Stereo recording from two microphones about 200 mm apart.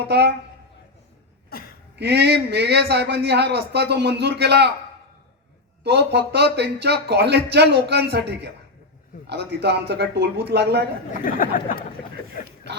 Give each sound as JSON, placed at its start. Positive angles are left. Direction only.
{"t": 0.0, "sound": "a man's voice", "side_deg": -55}
{"t": 1.5, "sound": "a sound", "side_deg": 50}
{"t": 2.0, "sound": "a man's voice", "side_deg": -55}
{"t": 5.8, "sound": "a man's voice", "side_deg": -55}
{"t": 11.1, "sound": "speech", "side_deg": 45}